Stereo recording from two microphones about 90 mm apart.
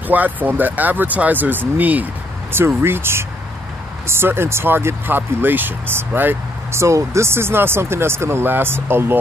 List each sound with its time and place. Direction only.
0.1 s speech: 20° right (ahead or behind)